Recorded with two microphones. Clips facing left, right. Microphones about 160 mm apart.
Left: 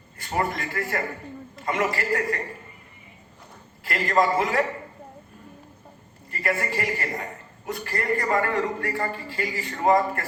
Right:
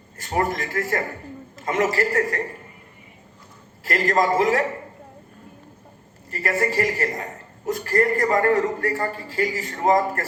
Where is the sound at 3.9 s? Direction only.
40° right (ahead or behind).